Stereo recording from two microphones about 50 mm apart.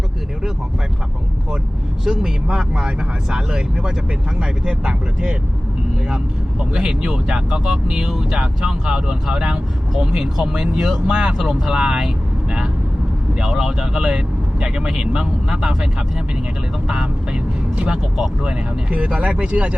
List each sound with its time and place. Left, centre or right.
2.0 s speech: centre
7.1 s speech: centre
16.9 s speech: centre
18.4 s speech: right